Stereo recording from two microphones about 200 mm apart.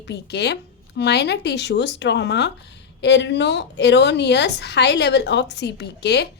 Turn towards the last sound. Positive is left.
turn(degrees=55)  # may be behind; listen again after turning